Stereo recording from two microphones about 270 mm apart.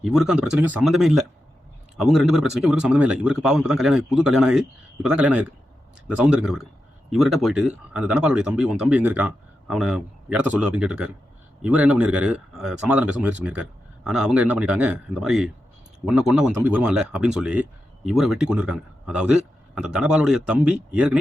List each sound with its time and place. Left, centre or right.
0.0 s speech: centre